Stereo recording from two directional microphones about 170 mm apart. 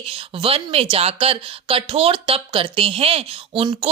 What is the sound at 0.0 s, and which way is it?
Speech, 35° right (ahead or behind).